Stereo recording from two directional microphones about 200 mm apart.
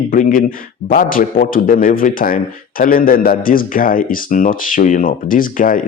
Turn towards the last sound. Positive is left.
turn(degrees=45)  # may be behind; listen again after turning